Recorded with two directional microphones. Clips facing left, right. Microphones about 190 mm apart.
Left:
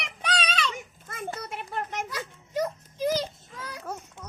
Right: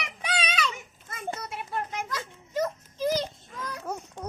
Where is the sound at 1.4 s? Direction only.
50° left (ahead or behind).